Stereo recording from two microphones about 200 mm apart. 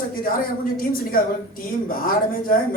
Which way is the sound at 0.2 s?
45° left (ahead or behind).